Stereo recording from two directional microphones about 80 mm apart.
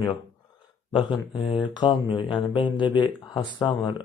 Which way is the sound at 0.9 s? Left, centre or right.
Left.